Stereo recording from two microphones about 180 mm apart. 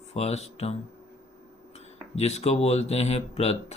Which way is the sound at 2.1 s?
35° left (ahead or behind).